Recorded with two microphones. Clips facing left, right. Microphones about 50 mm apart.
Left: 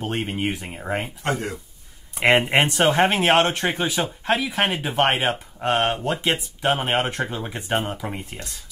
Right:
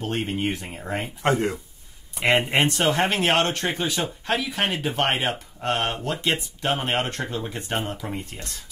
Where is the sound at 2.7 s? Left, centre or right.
Centre.